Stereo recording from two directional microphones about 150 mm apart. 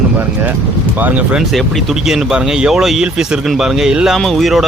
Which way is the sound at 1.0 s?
5° right (ahead or behind).